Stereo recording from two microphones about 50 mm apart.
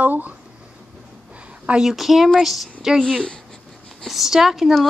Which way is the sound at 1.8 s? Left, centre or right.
Centre.